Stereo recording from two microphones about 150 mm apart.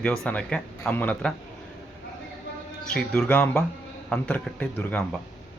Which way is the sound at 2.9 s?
5° left (ahead or behind).